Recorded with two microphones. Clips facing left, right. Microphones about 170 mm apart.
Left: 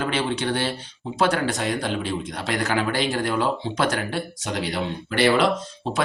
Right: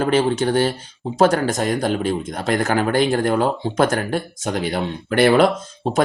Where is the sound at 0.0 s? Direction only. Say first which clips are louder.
Right 7 dB; 45° right (ahead or behind).